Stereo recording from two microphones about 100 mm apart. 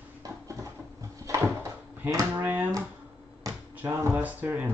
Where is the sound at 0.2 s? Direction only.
35° right (ahead or behind).